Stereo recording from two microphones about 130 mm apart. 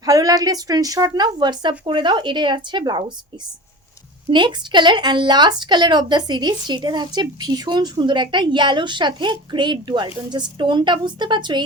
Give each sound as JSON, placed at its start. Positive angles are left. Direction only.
{"t": 0.0, "sound": "speech", "side_deg": -30}
{"t": 4.3, "sound": "speech", "side_deg": -35}